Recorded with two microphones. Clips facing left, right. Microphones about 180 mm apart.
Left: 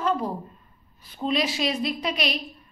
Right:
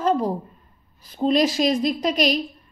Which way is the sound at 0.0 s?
40° right (ahead or behind).